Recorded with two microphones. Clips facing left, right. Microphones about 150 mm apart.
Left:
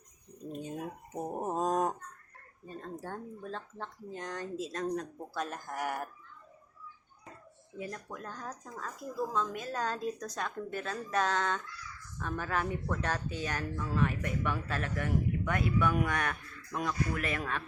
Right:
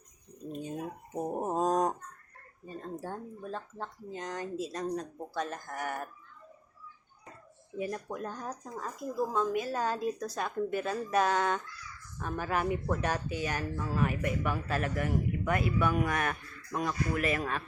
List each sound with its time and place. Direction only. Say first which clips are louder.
0.7 s a sound: right 2 dB; 10° right (ahead or behind)
2.6 s speech: right 2 dB; 5° right (ahead or behind)
7.8 s speech: right 6 dB; 20° right (ahead or behind)